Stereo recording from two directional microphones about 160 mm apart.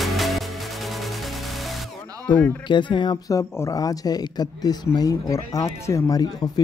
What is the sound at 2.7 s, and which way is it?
Speech, 30° left (ahead or behind).